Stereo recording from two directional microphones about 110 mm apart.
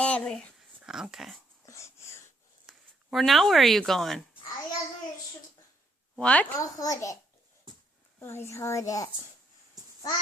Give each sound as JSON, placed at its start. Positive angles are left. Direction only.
{"t": 0.0, "sound": "speech", "side_deg": 10}
{"t": 0.8, "sound": "speech", "side_deg": -5}
{"t": 1.6, "sound": "wheeze", "side_deg": 25}
{"t": 2.6, "sound": "speech", "side_deg": 0}
{"t": 6.1, "sound": "a woman's voice", "side_deg": 10}
{"t": 6.6, "sound": "a child's voice", "side_deg": 30}
{"t": 8.2, "sound": "a child's voice", "side_deg": 20}